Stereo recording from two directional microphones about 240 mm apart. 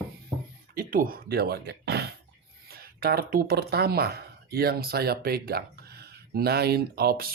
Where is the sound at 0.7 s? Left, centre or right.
Right.